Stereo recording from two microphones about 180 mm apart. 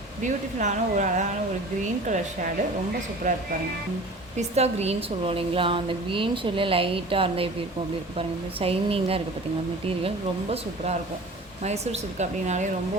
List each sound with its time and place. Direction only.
0.2 s speech: 45° right (ahead or behind)
4.4 s a woman's voice: 35° right (ahead or behind)
8.5 s a woman's voice: 30° right (ahead or behind)
11.6 s a woman's voice: 40° right (ahead or behind)